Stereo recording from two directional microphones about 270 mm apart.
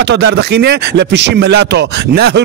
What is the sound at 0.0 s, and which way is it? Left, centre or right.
Speech, right.